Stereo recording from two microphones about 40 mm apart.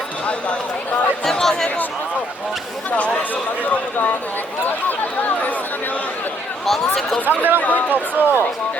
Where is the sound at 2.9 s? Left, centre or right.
Left.